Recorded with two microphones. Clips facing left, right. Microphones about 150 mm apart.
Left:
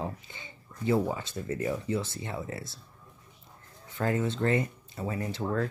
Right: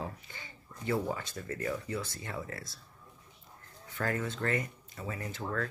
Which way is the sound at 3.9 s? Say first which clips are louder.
Left 5 dB; 25° left (ahead or behind).